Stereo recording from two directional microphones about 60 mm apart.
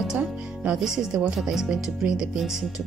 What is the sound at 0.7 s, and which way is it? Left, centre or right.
Speech, centre.